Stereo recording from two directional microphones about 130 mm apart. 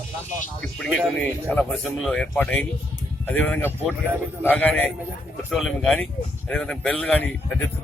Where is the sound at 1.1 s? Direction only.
10° left (ahead or behind).